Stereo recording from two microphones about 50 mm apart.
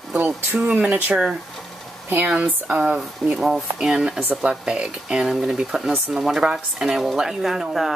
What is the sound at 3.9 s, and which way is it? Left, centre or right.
Speech, centre.